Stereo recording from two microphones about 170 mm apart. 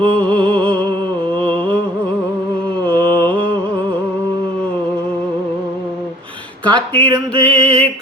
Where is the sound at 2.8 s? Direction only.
10° left (ahead or behind).